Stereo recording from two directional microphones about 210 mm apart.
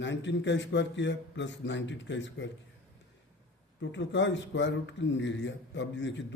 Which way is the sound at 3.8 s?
60° left (ahead or behind).